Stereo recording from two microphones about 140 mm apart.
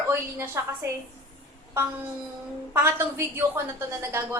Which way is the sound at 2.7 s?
15° right (ahead or behind).